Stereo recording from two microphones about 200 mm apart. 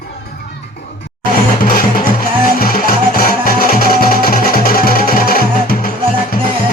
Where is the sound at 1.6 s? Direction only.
45° left (ahead or behind).